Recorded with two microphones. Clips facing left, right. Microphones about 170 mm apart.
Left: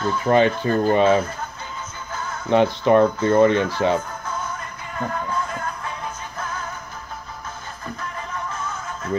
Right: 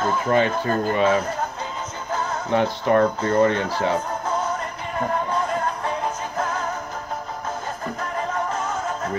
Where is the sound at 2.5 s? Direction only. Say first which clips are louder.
Left 4 dB; 20° left (ahead or behind).